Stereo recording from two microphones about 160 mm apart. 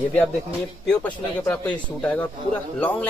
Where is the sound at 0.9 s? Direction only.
5° left (ahead or behind).